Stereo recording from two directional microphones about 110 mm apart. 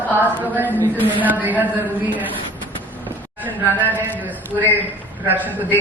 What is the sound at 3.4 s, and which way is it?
A woman's voice, 15° right (ahead or behind).